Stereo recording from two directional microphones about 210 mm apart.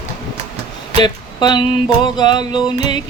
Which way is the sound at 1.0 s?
20° left (ahead or behind).